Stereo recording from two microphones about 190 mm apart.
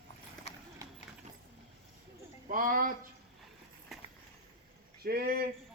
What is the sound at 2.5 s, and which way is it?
Speech, 45° right (ahead or behind).